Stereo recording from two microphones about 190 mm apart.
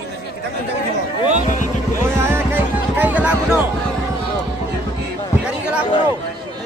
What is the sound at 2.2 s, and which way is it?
Music, 15° right (ahead or behind).